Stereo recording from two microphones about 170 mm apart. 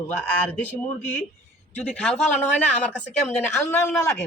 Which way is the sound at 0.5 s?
10° left (ahead or behind).